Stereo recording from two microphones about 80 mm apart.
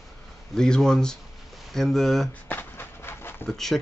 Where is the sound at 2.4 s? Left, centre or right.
Left.